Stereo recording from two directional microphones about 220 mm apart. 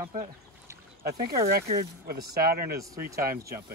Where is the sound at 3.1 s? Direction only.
45° right (ahead or behind).